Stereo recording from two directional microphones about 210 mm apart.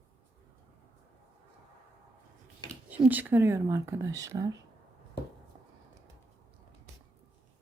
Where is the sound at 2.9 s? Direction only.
10° right (ahead or behind).